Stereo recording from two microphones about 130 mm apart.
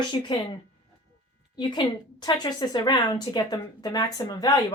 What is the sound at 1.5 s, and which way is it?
A woman's voice, 35° left (ahead or behind).